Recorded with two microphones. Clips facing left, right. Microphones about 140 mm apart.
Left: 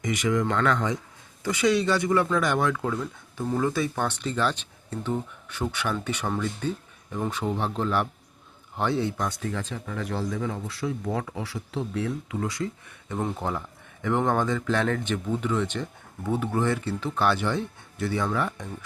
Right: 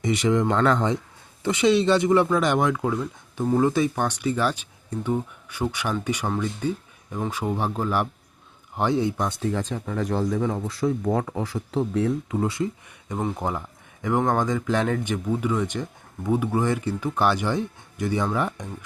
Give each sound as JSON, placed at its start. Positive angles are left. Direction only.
{"t": 0.0, "sound": "speech", "side_deg": -30}
{"t": 9.4, "sound": "speech", "side_deg": -35}